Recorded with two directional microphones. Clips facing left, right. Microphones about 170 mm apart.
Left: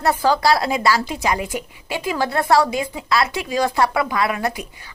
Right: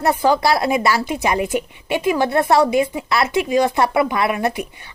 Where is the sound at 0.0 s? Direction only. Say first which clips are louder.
Right 1 dB; 20° right (ahead or behind).